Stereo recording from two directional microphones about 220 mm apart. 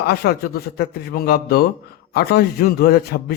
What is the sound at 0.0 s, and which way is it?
A man's voice, 45° left (ahead or behind).